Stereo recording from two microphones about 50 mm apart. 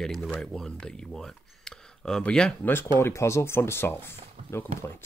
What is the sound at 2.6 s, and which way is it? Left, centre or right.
Speech, left.